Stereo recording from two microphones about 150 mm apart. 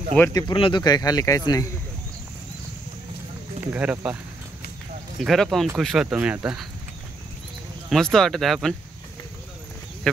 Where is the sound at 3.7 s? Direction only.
10° right (ahead or behind).